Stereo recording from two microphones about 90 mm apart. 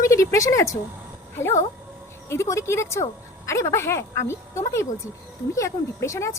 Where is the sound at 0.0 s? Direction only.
35° left (ahead or behind).